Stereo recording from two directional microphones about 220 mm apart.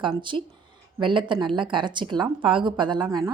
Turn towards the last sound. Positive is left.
turn(degrees=-15)  # may be behind; listen again after turning